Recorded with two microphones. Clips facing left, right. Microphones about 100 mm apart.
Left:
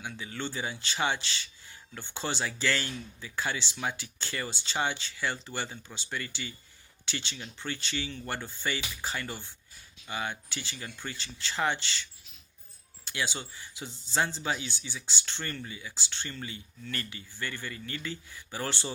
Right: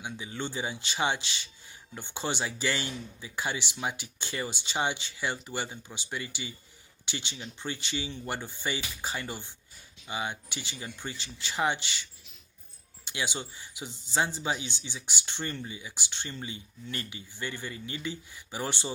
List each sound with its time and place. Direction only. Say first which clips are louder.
0.0 s speech: right 1 dB; 20° right (ahead or behind)
13.1 s speech: even; 20° right (ahead or behind)